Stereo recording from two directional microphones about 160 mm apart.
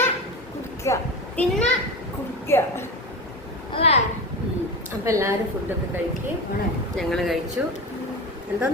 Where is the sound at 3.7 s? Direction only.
40° left (ahead or behind).